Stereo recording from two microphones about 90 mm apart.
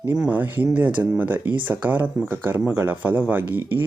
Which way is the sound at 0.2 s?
20° right (ahead or behind).